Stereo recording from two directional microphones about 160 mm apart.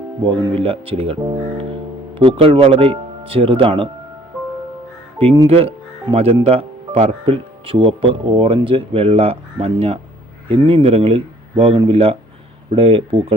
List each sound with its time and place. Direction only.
0.3 s speech: 35° right (ahead or behind)
2.1 s speech: 35° right (ahead or behind)
5.1 s speech: 30° right (ahead or behind)